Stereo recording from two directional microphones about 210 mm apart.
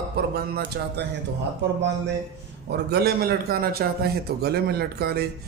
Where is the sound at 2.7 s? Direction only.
50° right (ahead or behind).